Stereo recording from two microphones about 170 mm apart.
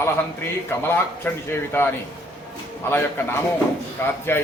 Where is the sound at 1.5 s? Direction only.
15° left (ahead or behind).